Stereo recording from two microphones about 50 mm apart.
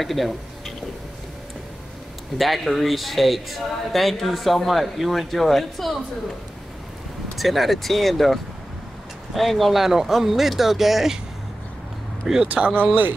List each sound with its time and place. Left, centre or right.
0.0 s speech: centre
2.3 s speech: centre
7.3 s speech: centre
12.2 s speech: centre
12.7 s speech: right